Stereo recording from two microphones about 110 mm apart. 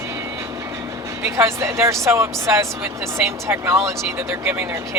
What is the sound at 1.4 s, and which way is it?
Speech, 25° right (ahead or behind).